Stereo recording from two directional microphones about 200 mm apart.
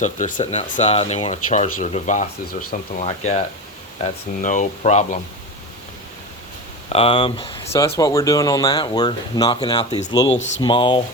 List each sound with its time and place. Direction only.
0.0 s speech: 40° left (ahead or behind)
6.9 s speech: 25° left (ahead or behind)